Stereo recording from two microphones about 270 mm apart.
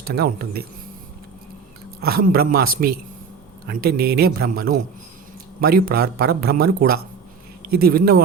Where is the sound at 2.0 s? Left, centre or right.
Right.